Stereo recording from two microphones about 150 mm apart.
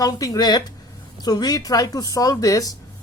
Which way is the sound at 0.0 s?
25° left (ahead or behind).